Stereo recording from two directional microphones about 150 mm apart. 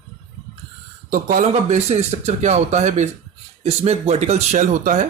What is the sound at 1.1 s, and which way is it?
Speech, 65° right (ahead or behind).